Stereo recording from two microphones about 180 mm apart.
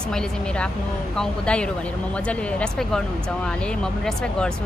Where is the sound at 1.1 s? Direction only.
5° left (ahead or behind).